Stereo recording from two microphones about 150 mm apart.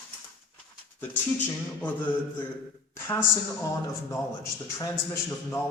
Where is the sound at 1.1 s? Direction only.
10° left (ahead or behind).